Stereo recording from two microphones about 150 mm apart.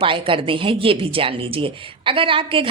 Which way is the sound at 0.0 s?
35° right (ahead or behind).